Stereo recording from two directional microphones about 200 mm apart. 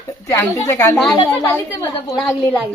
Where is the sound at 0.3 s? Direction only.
15° left (ahead or behind).